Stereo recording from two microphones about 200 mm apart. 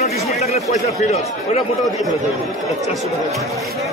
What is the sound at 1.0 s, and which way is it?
Speech, 35° left (ahead or behind).